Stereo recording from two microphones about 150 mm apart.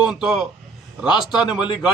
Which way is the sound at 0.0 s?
5° right (ahead or behind).